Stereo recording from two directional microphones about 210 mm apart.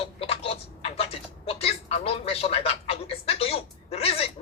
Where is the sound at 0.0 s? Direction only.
25° left (ahead or behind).